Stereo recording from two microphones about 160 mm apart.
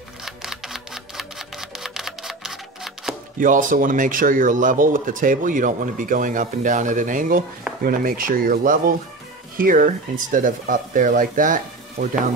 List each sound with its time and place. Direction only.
0.2 s camera: centre (ahead or behind)
3.3 s speech: 55° right (ahead or behind)